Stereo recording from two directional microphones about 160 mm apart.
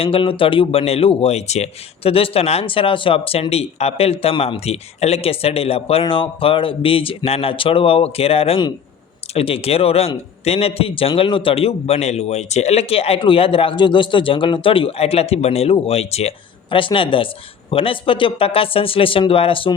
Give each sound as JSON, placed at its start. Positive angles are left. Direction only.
{"t": 0.0, "sound": "speech", "side_deg": 35}